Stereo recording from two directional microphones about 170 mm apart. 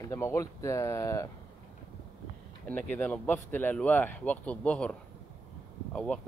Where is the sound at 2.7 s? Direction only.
10° left (ahead or behind).